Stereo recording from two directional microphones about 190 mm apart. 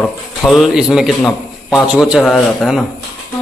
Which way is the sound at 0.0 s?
Centre (ahead or behind).